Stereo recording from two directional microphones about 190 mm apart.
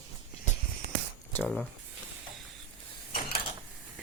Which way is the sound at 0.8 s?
55° right (ahead or behind).